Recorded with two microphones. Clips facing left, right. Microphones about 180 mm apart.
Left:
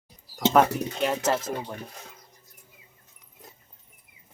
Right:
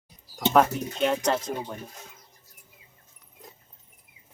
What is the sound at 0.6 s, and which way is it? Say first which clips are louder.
Speech: even; centre (ahead or behind).